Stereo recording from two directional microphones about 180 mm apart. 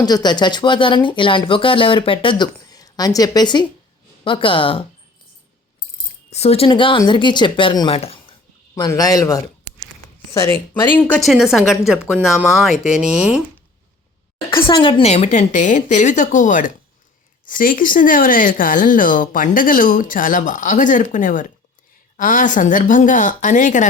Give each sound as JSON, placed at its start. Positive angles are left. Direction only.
{"t": 0.0, "sound": "speech", "side_deg": 20}
{"t": 6.3, "sound": "speech", "side_deg": 35}
{"t": 8.7, "sound": "speech", "side_deg": 20}
{"t": 14.5, "sound": "speech", "side_deg": 25}